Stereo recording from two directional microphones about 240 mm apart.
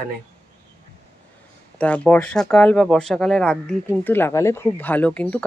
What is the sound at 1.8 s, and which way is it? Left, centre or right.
Speech, centre.